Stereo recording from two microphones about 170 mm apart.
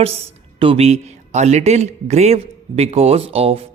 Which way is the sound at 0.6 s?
35° right (ahead or behind).